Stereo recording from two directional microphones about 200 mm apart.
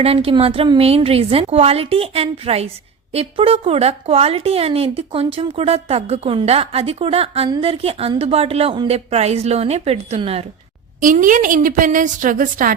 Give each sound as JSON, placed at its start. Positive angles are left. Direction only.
{"t": 0.0, "sound": "a woman's voice", "side_deg": -30}
{"t": 11.0, "sound": "a woman's voice", "side_deg": -40}